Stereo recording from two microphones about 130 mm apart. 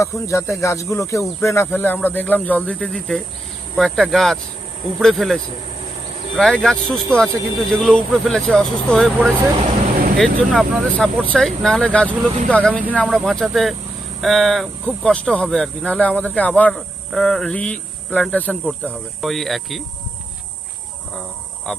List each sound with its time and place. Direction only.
0.0 s speech: 25° left (ahead or behind); by 19.8 s centre (ahead or behind)